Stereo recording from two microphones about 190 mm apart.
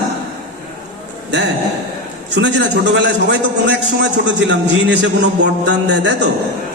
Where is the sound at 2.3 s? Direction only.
65° right (ahead or behind).